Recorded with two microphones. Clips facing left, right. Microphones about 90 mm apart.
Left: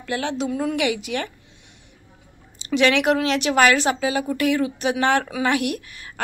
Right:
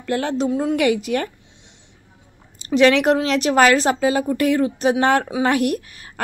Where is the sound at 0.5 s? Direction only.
25° right (ahead or behind).